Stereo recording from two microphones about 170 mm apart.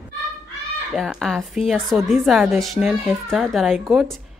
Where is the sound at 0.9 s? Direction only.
Centre (ahead or behind).